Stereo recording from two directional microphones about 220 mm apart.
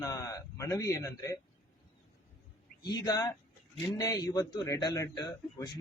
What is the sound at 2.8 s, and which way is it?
A man's voice, 20° left (ahead or behind).